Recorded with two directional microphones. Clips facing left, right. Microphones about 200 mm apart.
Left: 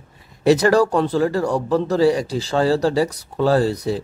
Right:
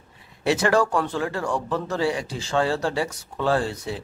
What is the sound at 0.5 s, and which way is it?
Speech, 40° left (ahead or behind).